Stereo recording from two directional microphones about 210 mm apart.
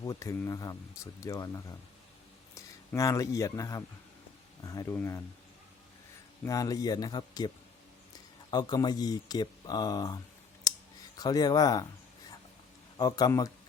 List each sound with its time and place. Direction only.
0.0 s speech: 15° left (ahead or behind)
6.4 s speech: 15° left (ahead or behind)
11.2 s speech: 15° left (ahead or behind)
13.0 s speech: 20° left (ahead or behind)